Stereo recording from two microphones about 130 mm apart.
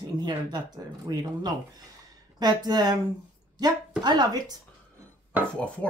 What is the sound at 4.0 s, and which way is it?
Speech, 30° right (ahead or behind).